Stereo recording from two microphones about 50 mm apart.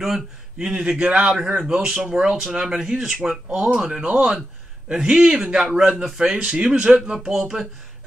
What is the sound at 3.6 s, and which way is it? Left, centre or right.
A man's voice, right.